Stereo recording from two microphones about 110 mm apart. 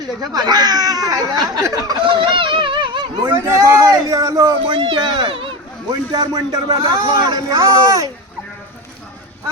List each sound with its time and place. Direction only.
0.2 s a man's voice: 40° right (ahead or behind)
2.0 s speech: 50° right (ahead or behind)
3.2 s a man's voice: 25° right (ahead or behind)
4.7 s speech: 55° right (ahead or behind)
5.3 s a sound: 55° right (ahead or behind)
5.9 s a man's voice: 40° right (ahead or behind)